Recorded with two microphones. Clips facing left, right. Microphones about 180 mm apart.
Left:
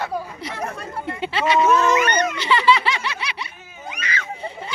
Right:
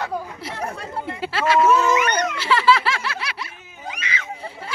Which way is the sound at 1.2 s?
5° right (ahead or behind).